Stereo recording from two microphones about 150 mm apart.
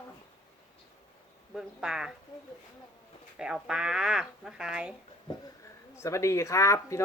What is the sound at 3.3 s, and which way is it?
Speech, 5° right (ahead or behind).